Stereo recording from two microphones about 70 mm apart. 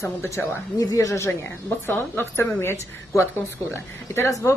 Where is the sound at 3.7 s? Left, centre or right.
Left.